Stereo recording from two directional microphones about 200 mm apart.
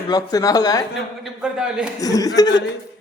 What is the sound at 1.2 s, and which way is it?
Speech, 5° right (ahead or behind).